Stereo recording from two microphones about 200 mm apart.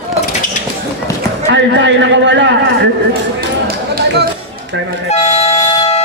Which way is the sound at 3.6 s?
50° right (ahead or behind).